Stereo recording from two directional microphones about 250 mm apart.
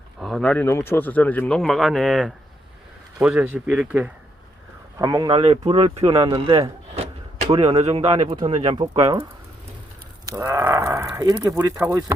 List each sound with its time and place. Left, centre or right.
0.2 s speech: centre
10.3 s speech: centre